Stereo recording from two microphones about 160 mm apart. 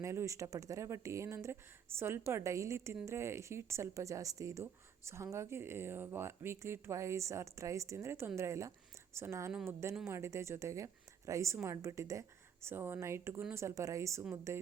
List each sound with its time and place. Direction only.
0.0 s a woman's voice: 20° right (ahead or behind)